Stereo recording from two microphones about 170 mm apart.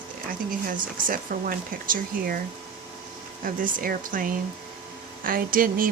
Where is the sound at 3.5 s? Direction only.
55° right (ahead or behind).